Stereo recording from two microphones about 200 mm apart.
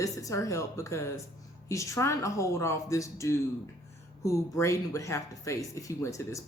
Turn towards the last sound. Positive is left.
turn(degrees=15)  # may be behind; listen again after turning